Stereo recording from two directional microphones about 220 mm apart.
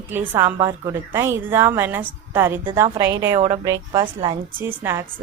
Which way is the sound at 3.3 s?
30° right (ahead or behind).